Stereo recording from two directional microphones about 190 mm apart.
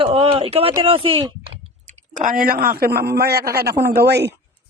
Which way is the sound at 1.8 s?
40° right (ahead or behind).